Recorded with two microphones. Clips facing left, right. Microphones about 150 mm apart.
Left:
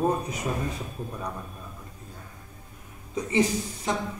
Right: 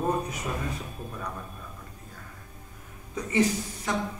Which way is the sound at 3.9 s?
20° left (ahead or behind).